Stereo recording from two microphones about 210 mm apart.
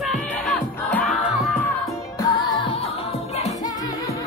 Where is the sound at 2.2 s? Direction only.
20° left (ahead or behind).